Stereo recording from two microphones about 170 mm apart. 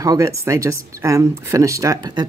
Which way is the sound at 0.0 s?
20° right (ahead or behind).